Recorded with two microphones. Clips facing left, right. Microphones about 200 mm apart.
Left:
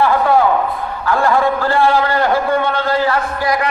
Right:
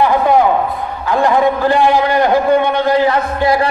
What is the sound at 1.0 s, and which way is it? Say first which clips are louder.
A man's voice: right 2 dB; 20° right (ahead or behind).